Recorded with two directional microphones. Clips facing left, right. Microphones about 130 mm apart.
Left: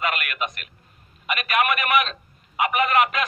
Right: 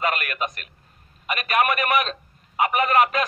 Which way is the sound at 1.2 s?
35° right (ahead or behind).